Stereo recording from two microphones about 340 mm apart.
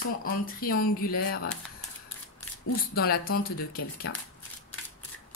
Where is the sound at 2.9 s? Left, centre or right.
Left.